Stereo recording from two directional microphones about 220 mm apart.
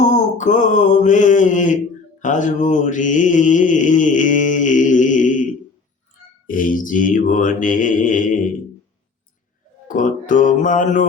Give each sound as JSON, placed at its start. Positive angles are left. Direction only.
{"t": 0.0, "sound": "mantra", "side_deg": 35}
{"t": 6.5, "sound": "mantra", "side_deg": 40}
{"t": 9.9, "sound": "music", "side_deg": 35}